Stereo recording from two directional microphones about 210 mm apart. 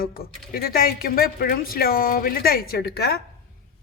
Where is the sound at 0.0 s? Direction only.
45° left (ahead or behind).